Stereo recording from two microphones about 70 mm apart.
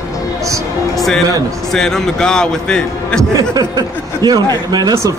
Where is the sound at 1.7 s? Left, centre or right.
Centre.